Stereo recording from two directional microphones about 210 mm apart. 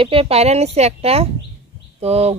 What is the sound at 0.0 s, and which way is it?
A woman's voice, 25° right (ahead or behind).